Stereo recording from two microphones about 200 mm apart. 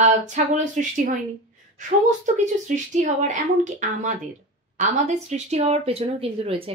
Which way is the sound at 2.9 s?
40° right (ahead or behind).